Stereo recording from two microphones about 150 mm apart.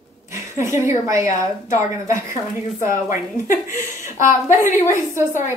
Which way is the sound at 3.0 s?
60° left (ahead or behind).